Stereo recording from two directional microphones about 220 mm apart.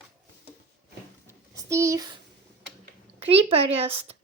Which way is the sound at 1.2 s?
15° right (ahead or behind).